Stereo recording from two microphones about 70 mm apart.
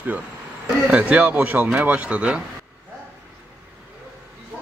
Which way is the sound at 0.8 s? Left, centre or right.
Centre.